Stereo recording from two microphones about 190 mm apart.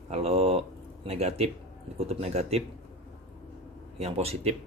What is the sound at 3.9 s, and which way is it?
Speech, 35° right (ahead or behind).